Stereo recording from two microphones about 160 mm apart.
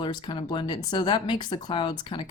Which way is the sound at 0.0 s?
30° left (ahead or behind).